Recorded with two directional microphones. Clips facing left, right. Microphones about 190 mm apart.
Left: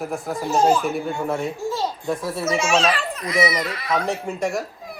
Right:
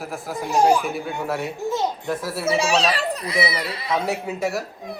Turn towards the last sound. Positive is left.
turn(degrees=-5)  # may be behind; listen again after turning